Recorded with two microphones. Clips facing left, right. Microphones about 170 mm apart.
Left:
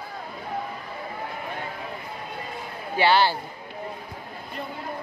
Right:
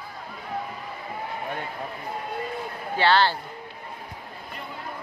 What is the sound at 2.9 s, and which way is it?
Speech, 10° left (ahead or behind).